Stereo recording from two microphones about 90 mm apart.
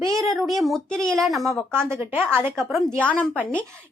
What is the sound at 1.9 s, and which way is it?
Speech, 20° right (ahead or behind).